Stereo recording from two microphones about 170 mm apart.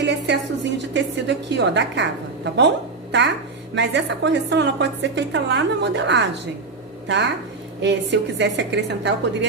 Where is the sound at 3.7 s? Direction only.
90° right.